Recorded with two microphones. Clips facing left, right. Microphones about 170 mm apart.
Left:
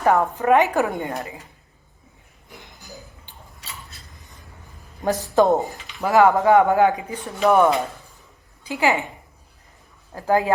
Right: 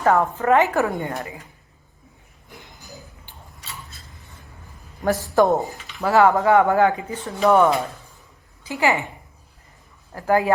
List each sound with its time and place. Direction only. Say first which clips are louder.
0.0 s speech: even; 15° left (ahead or behind)
5.0 s speech: even; 20° left (ahead or behind)
10.2 s speech: even; 15° left (ahead or behind)